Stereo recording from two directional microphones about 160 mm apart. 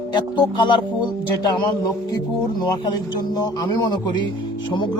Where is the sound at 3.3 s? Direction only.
25° left (ahead or behind).